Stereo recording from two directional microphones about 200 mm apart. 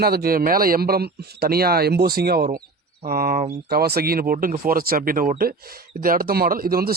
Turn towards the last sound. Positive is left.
turn(degrees=-45)  # may be behind; listen again after turning